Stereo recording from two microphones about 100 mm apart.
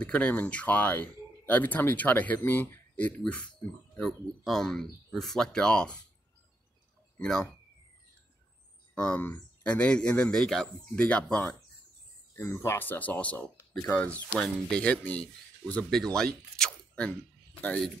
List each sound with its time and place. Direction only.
0.0 s speech: 10° left (ahead or behind)
7.2 s speech: 5° left (ahead or behind)
8.9 s speech: 10° left (ahead or behind)
12.4 s speech: 25° left (ahead or behind); by 17.1 s 10° left (ahead or behind)